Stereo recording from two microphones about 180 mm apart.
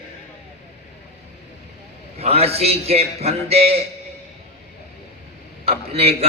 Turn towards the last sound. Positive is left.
turn(degrees=-35)  # may be behind; listen again after turning